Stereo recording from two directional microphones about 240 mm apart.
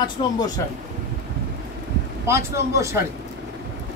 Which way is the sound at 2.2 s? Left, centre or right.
Centre.